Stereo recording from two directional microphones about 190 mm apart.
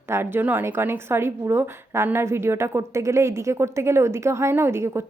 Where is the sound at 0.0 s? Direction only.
15° right (ahead or behind).